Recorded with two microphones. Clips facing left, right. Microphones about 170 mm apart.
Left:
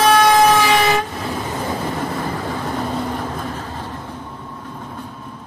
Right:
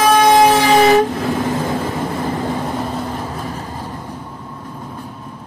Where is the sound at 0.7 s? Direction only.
40° right (ahead or behind).